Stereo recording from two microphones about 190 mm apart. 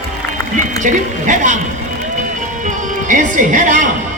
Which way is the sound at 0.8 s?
40° right (ahead or behind).